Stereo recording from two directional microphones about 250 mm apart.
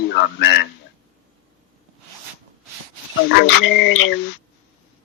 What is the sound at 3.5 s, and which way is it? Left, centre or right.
Speech, left.